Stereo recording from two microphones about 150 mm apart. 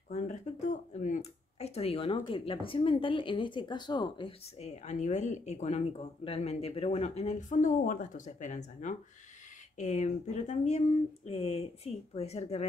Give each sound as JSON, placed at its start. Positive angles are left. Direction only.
{"t": 0.1, "sound": "speech", "side_deg": 50}
{"t": 4.6, "sound": "speech", "side_deg": 50}
{"t": 11.2, "sound": "speech", "side_deg": 40}